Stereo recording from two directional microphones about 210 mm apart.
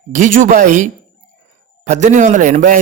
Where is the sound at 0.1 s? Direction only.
35° right (ahead or behind).